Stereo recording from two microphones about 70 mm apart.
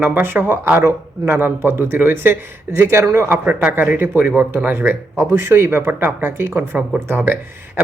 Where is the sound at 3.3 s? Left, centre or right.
Right.